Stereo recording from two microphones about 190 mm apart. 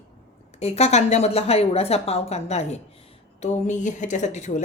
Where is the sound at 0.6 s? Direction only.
35° left (ahead or behind).